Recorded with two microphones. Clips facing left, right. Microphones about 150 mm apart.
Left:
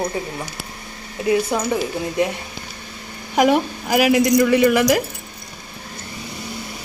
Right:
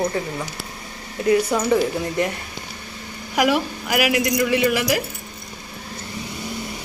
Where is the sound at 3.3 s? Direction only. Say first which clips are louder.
Left 3 dB; 40° left (ahead or behind).